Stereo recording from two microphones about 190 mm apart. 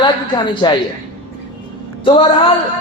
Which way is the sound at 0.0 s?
25° left (ahead or behind).